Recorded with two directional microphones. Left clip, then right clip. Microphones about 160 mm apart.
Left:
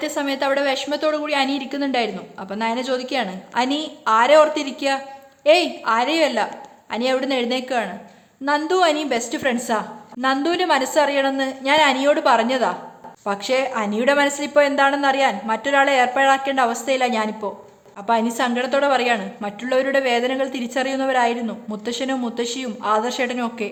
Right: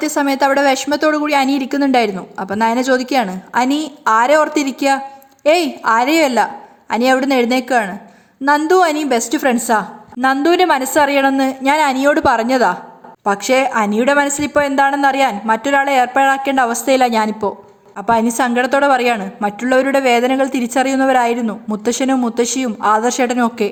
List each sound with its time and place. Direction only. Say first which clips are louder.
0.0 s a woman's voice: right 7 dB; 40° right (ahead or behind)